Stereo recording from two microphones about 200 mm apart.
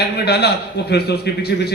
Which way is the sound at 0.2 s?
55° left (ahead or behind).